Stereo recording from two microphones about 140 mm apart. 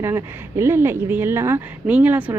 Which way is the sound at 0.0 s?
20° right (ahead or behind).